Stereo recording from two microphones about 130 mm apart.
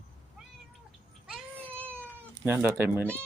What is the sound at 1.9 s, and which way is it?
Cat, 15° right (ahead or behind).